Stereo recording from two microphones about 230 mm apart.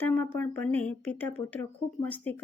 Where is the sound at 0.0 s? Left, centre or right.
Centre.